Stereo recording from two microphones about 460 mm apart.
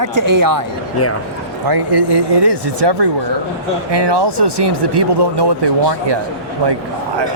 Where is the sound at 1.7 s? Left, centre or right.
Right.